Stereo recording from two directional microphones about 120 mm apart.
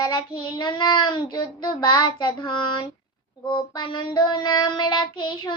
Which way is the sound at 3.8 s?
40° left (ahead or behind).